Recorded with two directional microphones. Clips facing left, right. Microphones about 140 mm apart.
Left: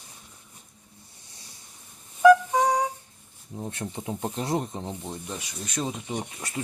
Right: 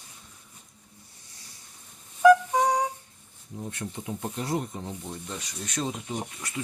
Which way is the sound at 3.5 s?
30° left (ahead or behind).